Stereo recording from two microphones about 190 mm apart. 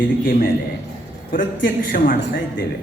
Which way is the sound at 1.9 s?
45° left (ahead or behind).